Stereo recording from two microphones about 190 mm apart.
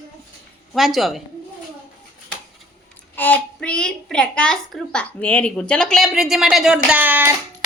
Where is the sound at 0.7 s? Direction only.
Centre (ahead or behind).